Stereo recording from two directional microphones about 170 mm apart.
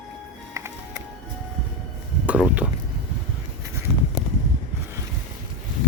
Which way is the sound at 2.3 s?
5° right (ahead or behind).